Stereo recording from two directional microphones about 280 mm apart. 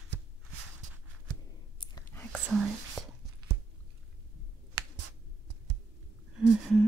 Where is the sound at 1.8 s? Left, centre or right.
Centre.